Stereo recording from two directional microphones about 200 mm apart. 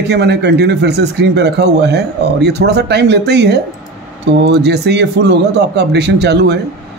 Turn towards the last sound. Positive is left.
turn(degrees=-55)  # may be behind; listen again after turning